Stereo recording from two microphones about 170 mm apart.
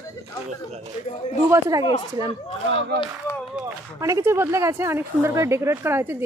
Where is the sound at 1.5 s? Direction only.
20° right (ahead or behind).